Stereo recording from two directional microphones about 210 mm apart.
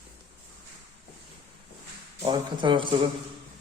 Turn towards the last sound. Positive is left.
turn(degrees=-20)  # may be behind; listen again after turning